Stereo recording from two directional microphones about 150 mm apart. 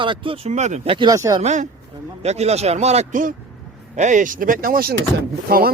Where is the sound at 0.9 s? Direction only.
25° right (ahead or behind).